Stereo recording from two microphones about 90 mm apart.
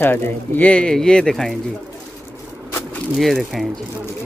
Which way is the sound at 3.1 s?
Centre (ahead or behind).